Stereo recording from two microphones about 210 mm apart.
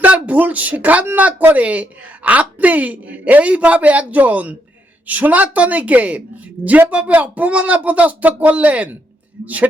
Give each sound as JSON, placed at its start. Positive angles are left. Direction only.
{"t": 0.0, "sound": "speech", "side_deg": -5}